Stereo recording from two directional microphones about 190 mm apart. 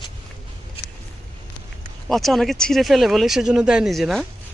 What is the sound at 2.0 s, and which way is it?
Speech, centre (ahead or behind).